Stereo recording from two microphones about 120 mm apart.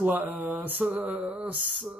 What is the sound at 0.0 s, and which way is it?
Speech, 15° right (ahead or behind).